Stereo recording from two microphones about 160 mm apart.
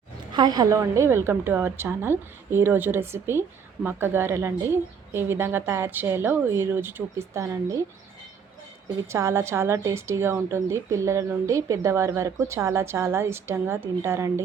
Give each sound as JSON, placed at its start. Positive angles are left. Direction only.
{"t": 0.3, "sound": "a woman's voice", "side_deg": -25}
{"t": 9.0, "sound": "a woman's voice", "side_deg": -15}